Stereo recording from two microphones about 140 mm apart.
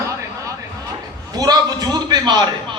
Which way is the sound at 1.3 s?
30° right (ahead or behind).